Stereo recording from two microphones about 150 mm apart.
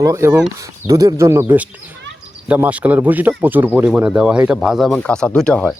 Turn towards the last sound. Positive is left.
turn(degrees=5)  # may be behind; listen again after turning